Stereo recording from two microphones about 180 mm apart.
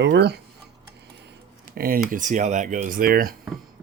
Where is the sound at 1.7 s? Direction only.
55° right (ahead or behind).